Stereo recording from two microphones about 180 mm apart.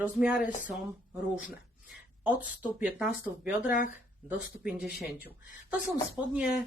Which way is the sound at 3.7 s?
45° left (ahead or behind).